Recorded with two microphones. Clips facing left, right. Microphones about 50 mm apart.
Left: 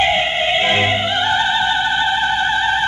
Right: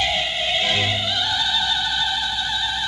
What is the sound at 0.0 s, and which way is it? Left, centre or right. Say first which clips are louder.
Music: left 7 dB; left.